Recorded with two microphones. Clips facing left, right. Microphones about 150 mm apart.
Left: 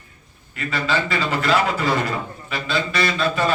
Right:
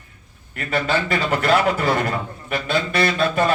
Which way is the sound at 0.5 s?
55° right (ahead or behind).